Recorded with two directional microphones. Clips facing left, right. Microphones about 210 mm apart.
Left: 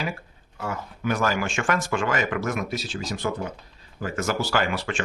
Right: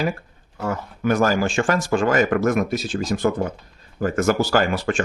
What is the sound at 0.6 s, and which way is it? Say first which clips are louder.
Speech: right 6 dB; 45° right (ahead or behind).